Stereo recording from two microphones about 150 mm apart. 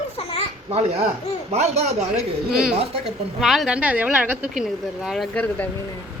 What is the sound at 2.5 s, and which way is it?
A woman's voice, 5° right (ahead or behind).